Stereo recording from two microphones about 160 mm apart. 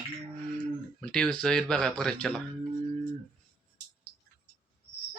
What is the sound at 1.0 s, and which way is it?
Speech, 5° left (ahead or behind).